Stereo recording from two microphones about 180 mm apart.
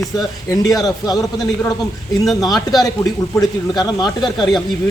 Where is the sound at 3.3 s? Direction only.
20° left (ahead or behind).